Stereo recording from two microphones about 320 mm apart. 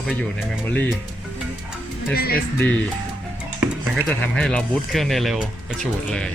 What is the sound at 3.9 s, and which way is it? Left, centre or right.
Speech, centre.